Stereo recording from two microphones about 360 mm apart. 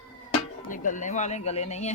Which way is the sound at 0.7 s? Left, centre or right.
Left.